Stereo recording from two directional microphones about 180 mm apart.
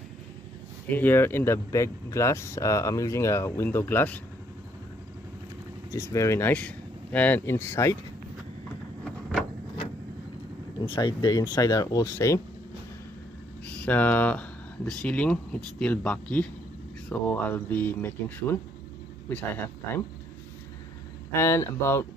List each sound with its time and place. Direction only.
0.9 s speech: 10° left (ahead or behind)
5.9 s speech: 15° left (ahead or behind)
10.8 s speech: 25° left (ahead or behind)
13.8 s speech: 10° left (ahead or behind)
21.3 s speech: 15° left (ahead or behind)